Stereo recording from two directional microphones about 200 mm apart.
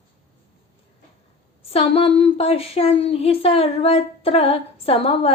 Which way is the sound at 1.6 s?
30° left (ahead or behind).